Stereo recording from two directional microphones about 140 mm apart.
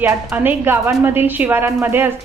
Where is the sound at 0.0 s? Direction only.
15° right (ahead or behind).